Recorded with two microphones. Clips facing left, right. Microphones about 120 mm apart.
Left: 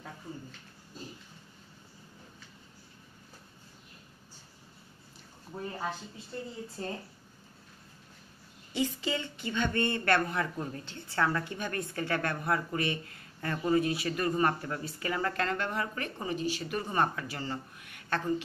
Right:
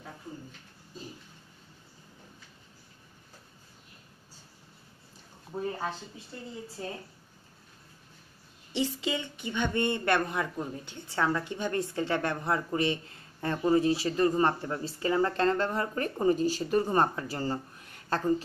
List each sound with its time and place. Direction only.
8.7 s a woman's voice: 20° right (ahead or behind); by 18.3 s 35° right (ahead or behind)